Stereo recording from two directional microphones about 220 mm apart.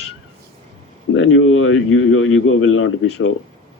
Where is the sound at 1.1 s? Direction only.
65° left (ahead or behind).